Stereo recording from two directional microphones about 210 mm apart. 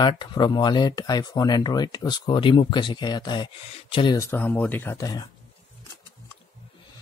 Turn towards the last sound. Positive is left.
turn(degrees=15)  # may be behind; listen again after turning